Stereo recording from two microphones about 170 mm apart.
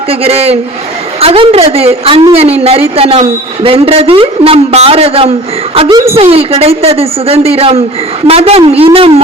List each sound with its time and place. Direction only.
0.1 s a woman's voice: 35° right (ahead or behind)